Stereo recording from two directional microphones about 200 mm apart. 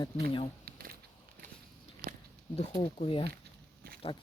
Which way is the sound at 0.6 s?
45° right (ahead or behind).